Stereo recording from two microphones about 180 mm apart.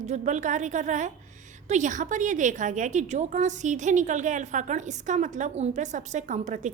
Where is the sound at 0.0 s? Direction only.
40° right (ahead or behind).